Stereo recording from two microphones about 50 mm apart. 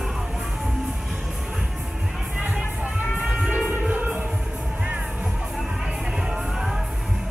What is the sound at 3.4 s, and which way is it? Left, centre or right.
Music, right.